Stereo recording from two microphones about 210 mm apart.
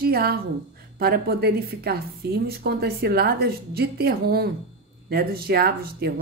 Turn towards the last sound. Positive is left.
turn(degrees=-45)  # may be behind; listen again after turning